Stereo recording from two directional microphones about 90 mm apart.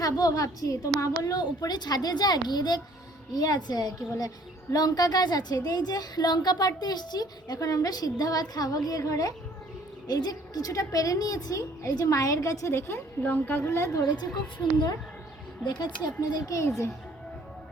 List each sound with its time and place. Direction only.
0.0 s a woman's voice: 45° left (ahead or behind)
15.6 s speech: 55° left (ahead or behind)
16.5 s a woman's voice: 35° left (ahead or behind)